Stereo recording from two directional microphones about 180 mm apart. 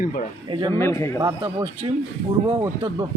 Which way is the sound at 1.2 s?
25° right (ahead or behind).